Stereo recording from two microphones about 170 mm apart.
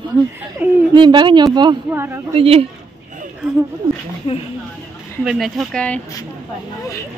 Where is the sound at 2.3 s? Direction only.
35° right (ahead or behind).